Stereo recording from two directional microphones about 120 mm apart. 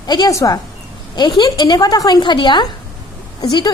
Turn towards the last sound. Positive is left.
turn(degrees=35)  # may be behind; listen again after turning